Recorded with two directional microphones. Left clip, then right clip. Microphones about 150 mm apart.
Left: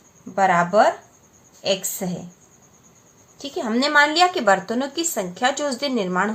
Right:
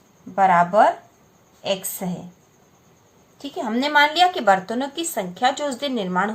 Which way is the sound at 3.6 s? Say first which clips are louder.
Even; 35° left (ahead or behind).